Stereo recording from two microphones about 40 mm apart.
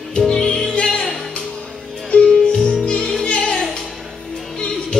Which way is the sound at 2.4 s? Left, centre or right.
Left.